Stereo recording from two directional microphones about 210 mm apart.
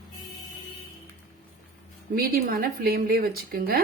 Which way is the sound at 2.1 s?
45° right (ahead or behind).